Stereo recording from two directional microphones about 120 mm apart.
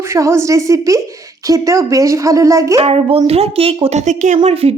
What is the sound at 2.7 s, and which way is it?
A woman's voice, 55° right (ahead or behind).